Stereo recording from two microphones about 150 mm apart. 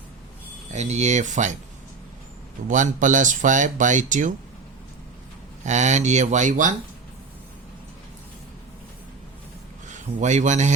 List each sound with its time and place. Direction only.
0.7 s speech: 50° right (ahead or behind)
2.6 s speech: 55° right (ahead or behind)
5.6 s speech: 50° right (ahead or behind)
9.9 s speech: 55° right (ahead or behind)